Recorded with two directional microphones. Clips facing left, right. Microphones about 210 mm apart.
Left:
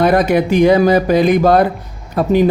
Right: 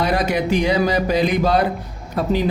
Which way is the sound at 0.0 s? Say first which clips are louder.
Left 7 dB; 55° left (ahead or behind).